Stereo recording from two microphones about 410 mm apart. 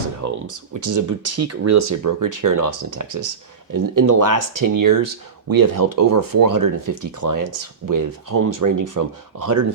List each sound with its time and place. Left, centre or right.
0.2 s speech: right